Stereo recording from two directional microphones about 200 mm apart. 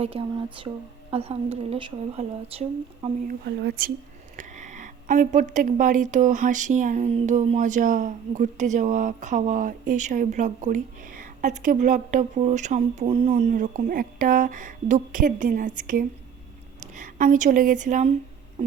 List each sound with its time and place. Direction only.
0.0 s speech: 30° right (ahead or behind)
3.2 s speech: 55° right (ahead or behind)
4.4 s a woman's voice: 35° right (ahead or behind)